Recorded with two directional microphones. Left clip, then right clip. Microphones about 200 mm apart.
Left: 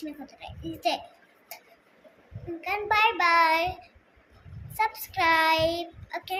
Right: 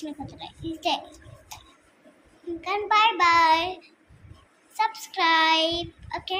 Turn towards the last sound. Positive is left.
turn(degrees=15)  # may be behind; listen again after turning